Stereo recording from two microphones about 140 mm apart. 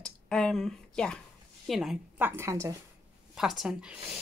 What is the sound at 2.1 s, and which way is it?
Speech, 15° right (ahead or behind).